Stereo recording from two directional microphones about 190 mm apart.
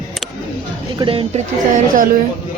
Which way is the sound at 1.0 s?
30° right (ahead or behind).